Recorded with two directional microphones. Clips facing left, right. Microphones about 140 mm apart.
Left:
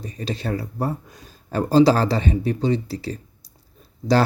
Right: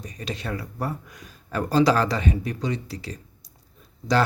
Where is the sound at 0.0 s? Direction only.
30° left (ahead or behind).